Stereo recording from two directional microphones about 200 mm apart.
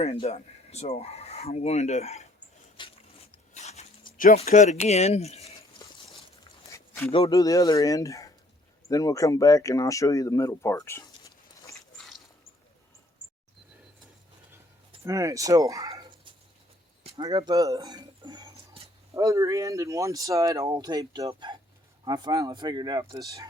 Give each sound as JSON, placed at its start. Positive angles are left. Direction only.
{"t": 0.0, "sound": "speech", "side_deg": 30}
{"t": 2.8, "sound": "mechanisms", "side_deg": 25}
{"t": 3.5, "sound": "zipper", "side_deg": 35}
{"t": 6.7, "sound": "a sound", "side_deg": 15}
{"t": 7.1, "sound": "speech", "side_deg": 25}
{"t": 15.0, "sound": "speech", "side_deg": -15}